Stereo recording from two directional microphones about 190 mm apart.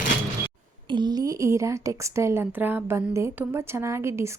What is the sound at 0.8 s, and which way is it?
A woman's voice, 25° right (ahead or behind).